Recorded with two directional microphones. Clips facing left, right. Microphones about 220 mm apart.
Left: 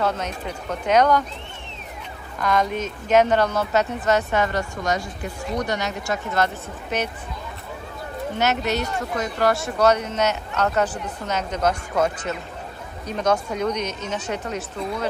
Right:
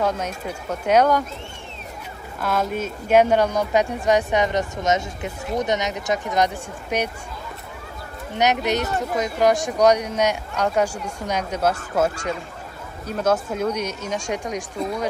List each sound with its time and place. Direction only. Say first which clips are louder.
0.0 s speech: right 1 dB; 10° right (ahead or behind)
2.4 s speech: left 1 dB; 5° right (ahead or behind)
8.4 s speech: right 3 dB; 15° right (ahead or behind)